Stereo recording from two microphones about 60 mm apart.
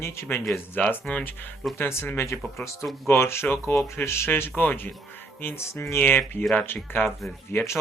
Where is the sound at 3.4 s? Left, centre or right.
Left.